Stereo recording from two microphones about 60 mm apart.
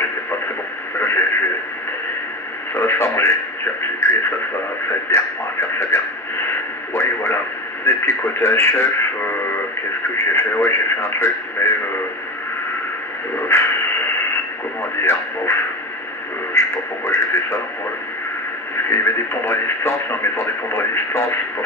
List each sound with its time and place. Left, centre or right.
0.9 s radio: left
2.7 s speech: left
10.1 s speech: left
13.5 s speech: left
15.0 s speech: left
16.5 s speech: left
18.9 s speech: left